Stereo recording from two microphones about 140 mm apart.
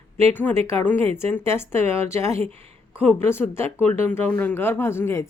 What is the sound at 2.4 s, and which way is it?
Speech, 45° right (ahead or behind).